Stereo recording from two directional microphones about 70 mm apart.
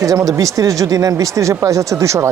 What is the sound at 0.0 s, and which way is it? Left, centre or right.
Speech, right.